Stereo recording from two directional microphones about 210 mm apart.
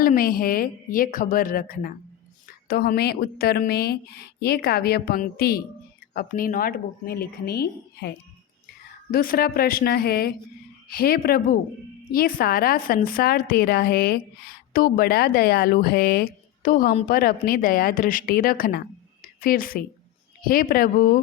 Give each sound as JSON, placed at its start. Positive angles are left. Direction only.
{"t": 0.0, "sound": "a woman's voice", "side_deg": 45}
{"t": 9.1, "sound": "a woman's voice", "side_deg": 45}